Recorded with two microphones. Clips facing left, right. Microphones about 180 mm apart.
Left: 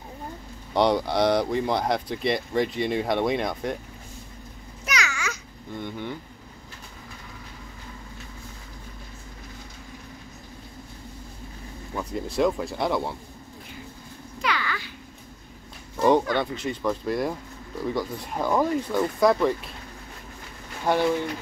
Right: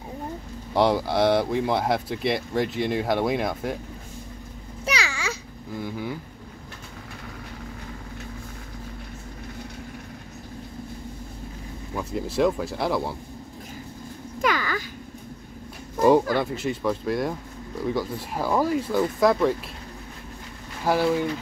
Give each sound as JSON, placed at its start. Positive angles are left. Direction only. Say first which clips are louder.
{"t": 0.7, "sound": "speech", "louder": "right 1 dB", "side_deg": 0}
{"t": 4.8, "sound": "babbling", "louder": "right 1 dB", "side_deg": -30}
{"t": 5.7, "sound": "speech", "louder": "right 2 dB", "side_deg": -5}
{"t": 11.9, "sound": "speech", "louder": "right 1 dB", "side_deg": -5}
{"t": 14.4, "sound": "a sound", "louder": "right 4 dB", "side_deg": -45}
{"t": 16.3, "sound": "speech", "louder": "right 2 dB", "side_deg": -5}
{"t": 20.8, "sound": "speech", "louder": "even", "side_deg": -5}